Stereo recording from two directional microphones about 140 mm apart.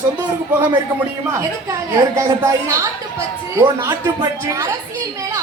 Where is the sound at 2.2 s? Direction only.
20° right (ahead or behind).